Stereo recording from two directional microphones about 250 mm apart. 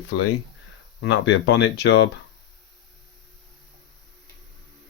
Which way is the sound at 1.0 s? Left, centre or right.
Left.